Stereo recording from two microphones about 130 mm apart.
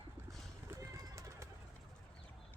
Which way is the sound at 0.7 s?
25° right (ahead or behind).